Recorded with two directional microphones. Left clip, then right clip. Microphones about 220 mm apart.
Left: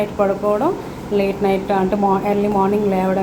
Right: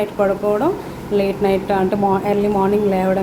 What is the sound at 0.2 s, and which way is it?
A woman's voice, 10° right (ahead or behind).